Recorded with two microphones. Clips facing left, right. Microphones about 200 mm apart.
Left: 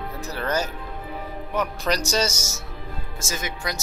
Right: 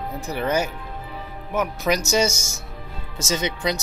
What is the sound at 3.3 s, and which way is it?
Speech, 20° right (ahead or behind).